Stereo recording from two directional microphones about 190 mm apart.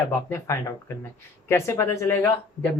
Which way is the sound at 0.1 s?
10° left (ahead or behind).